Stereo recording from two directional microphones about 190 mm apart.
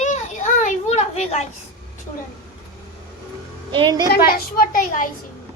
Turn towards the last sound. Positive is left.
turn(degrees=45)  # may be behind; listen again after turning